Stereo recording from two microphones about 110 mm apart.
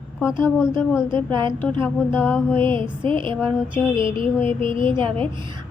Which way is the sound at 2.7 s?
50° right (ahead or behind).